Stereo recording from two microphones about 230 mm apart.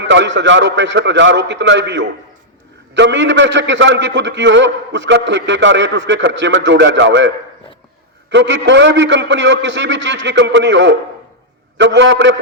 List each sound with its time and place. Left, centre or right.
0.0 s a man's voice: right